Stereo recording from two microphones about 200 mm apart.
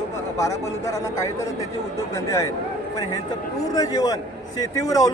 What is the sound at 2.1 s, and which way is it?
Speech, 15° left (ahead or behind).